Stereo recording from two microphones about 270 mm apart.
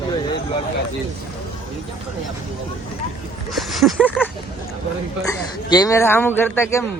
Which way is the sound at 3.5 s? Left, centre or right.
Centre.